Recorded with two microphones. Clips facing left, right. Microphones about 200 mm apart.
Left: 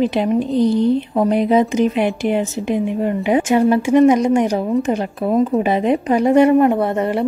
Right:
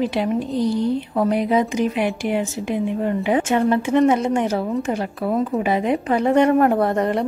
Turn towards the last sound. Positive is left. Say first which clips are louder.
# left 1 dB
turn(degrees=5)  # may be behind; listen again after turning